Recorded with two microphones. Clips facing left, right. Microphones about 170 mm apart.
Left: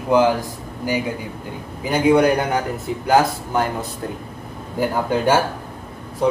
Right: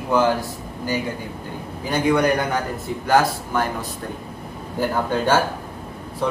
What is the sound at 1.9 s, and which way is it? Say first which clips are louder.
A man's voice: left 4 dB; 15° left (ahead or behind).